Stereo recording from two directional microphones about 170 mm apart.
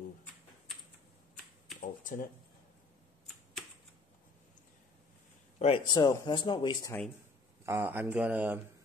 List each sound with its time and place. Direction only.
1.8 s speech: 55° left (ahead or behind)
5.6 s speech: 30° left (ahead or behind)
7.6 s speech: 15° right (ahead or behind)